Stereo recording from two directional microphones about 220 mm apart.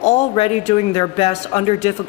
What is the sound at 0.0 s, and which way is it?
Speech, 30° left (ahead or behind).